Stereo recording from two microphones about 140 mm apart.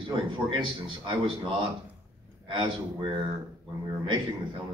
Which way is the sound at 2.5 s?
35° right (ahead or behind).